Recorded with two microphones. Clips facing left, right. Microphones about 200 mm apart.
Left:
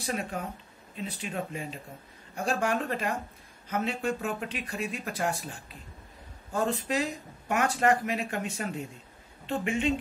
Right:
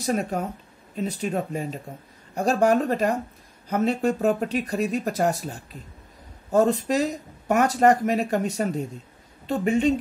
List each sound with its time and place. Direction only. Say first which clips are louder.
0.0 s speech: right 8 dB; 40° right (ahead or behind)